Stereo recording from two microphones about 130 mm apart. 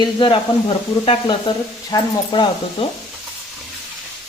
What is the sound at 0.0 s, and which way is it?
Speech, 40° left (ahead or behind).